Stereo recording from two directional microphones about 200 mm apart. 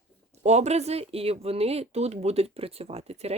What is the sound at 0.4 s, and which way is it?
Speech, 35° right (ahead or behind).